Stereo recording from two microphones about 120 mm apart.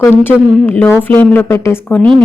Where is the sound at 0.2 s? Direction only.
15° left (ahead or behind).